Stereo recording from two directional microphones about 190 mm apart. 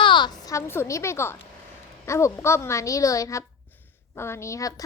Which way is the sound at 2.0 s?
15° left (ahead or behind).